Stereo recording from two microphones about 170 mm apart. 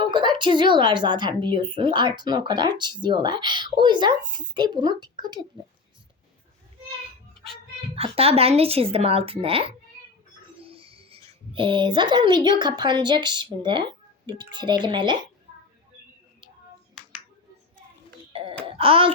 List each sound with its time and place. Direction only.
0.0 s a woman's voice: 30° right (ahead or behind)
7.9 s speech: 35° right (ahead or behind)
18.3 s wail: 35° right (ahead or behind)
18.8 s speech: 30° right (ahead or behind)